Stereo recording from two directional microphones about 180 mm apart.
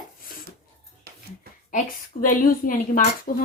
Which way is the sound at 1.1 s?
60° right (ahead or behind).